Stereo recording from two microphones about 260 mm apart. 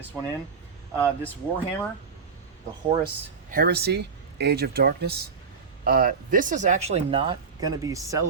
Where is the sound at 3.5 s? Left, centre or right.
Right; by 8.2 s centre.